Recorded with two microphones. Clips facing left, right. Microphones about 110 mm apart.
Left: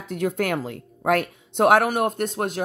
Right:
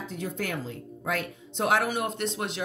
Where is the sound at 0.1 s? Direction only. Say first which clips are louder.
Left 10 dB; 65° left (ahead or behind).